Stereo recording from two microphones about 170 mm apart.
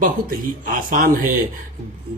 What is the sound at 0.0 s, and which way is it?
Speech, 50° right (ahead or behind).